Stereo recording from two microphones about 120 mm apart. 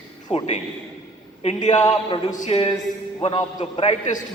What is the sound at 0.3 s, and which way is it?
A man's voice, 60° left (ahead or behind).